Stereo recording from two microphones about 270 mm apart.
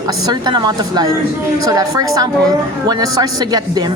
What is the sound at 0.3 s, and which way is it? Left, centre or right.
A woman's voice, centre.